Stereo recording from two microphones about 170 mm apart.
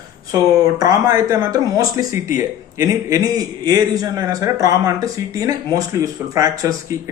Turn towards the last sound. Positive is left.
turn(degrees=-20)  # may be behind; listen again after turning